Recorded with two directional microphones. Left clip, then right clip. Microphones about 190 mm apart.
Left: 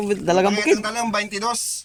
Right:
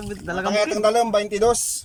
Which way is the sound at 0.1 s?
15° left (ahead or behind).